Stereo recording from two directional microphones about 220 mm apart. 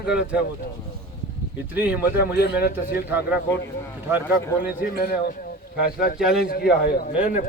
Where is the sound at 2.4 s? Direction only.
45° left (ahead or behind).